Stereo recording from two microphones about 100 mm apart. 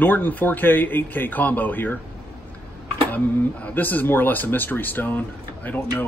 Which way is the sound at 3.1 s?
20° left (ahead or behind).